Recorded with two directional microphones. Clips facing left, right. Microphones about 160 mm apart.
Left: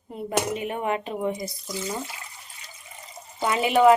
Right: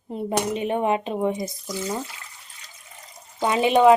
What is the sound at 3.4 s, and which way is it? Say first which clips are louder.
Speech: right 2 dB; 20° right (ahead or behind).